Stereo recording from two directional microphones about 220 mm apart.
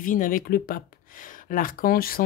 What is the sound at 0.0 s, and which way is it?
Speech, 40° left (ahead or behind).